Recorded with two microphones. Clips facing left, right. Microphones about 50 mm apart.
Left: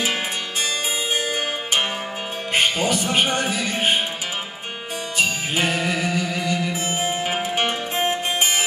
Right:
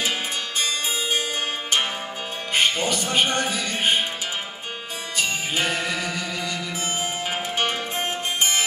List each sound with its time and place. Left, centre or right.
2.5 s speech: centre
5.1 s music: centre